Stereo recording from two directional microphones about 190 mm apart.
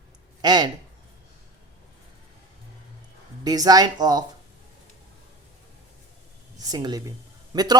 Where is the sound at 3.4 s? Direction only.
20° right (ahead or behind).